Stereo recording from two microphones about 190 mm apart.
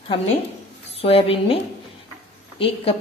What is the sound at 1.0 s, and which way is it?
A woman's voice, 30° left (ahead or behind).